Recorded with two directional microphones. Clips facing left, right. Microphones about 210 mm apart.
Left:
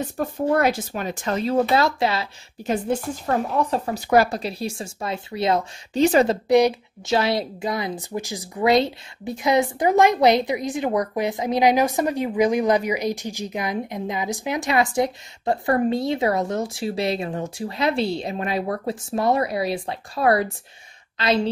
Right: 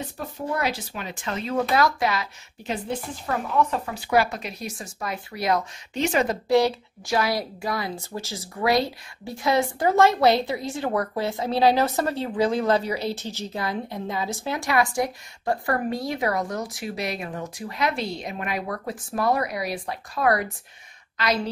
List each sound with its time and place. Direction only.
0.5 s speech: 50° left (ahead or behind); by 2.2 s 30° left (ahead or behind)
2.6 s a woman's voice: 45° left (ahead or behind)
3.3 s speech: 35° left (ahead or behind)
6.5 s a woman's voice: 15° left (ahead or behind)